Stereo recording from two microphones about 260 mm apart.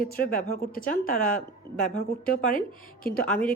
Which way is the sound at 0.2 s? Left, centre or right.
Left.